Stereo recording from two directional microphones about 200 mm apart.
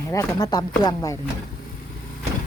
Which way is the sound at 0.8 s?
20° left (ahead or behind).